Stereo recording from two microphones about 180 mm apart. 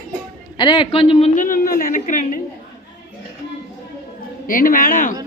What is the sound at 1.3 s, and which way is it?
Speech, 50° left (ahead or behind).